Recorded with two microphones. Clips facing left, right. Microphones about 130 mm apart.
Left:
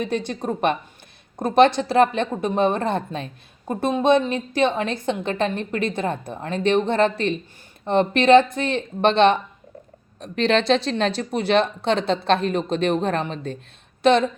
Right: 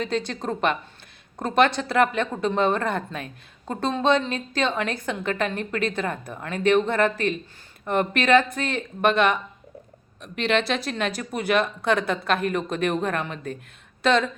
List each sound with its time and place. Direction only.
0.0 s a woman's voice: 20° left (ahead or behind)